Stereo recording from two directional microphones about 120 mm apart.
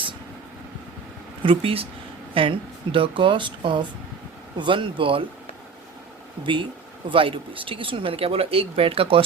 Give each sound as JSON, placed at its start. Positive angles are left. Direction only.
{"t": 1.4, "sound": "speech", "side_deg": -45}
{"t": 6.4, "sound": "speech", "side_deg": -45}